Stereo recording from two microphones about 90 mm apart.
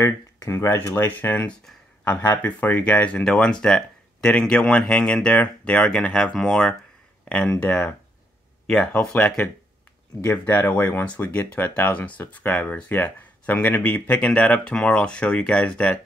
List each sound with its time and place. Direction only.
0.0 s speech: 35° left (ahead or behind); by 9.3 s 15° left (ahead or behind)
10.2 s speech: 25° left (ahead or behind)